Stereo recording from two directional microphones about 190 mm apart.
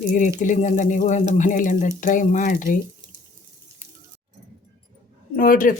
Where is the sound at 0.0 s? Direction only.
40° left (ahead or behind).